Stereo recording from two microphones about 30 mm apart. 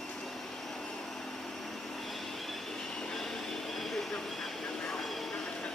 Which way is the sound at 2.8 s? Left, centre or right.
Left.